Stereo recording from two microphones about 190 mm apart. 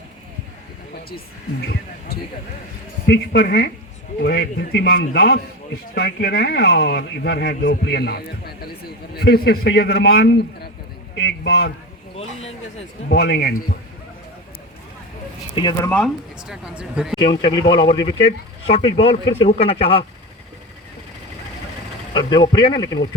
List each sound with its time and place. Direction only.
3.1 s speech: 55° left (ahead or behind)
12.1 s a man's voice: 35° left (ahead or behind)
13.1 s speech: 55° left (ahead or behind)
15.5 s speech: 20° left (ahead or behind)
16.5 s speech: 5° right (ahead or behind)
17.2 s speech: 25° left (ahead or behind)
22.1 s speech: 25° left (ahead or behind)